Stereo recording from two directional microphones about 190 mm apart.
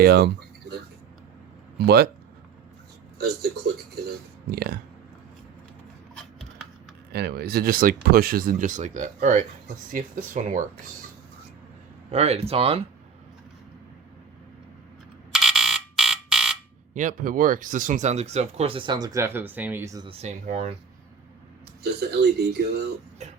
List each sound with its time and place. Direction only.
0.0 s a sound: 55° right (ahead or behind)
1.8 s speech: 60° right (ahead or behind)
3.2 s a man's voice: 60° right (ahead or behind)
4.5 s speech: 55° right (ahead or behind)
7.1 s speech: 60° right (ahead or behind)
12.1 s speech: 35° right (ahead or behind)
15.3 s fire alarm: centre (ahead or behind)
16.9 s speech: 40° right (ahead or behind); by 20.1 s 15° right (ahead or behind)
20.1 s speech: 35° right (ahead or behind)
21.8 s speech: 60° right (ahead or behind)
23.2 s a sound: 35° right (ahead or behind)